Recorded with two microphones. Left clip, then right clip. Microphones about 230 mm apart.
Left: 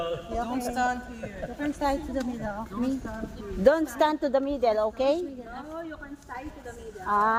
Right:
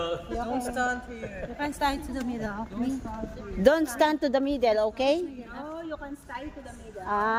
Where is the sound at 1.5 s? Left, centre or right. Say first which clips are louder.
Even; right.